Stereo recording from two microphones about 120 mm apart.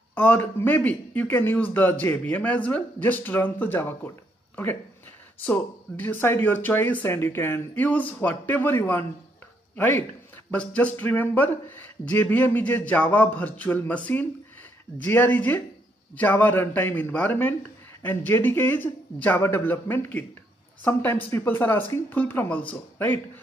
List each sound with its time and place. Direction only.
0.1 s speech: 15° left (ahead or behind)
5.4 s speech: 10° left (ahead or behind)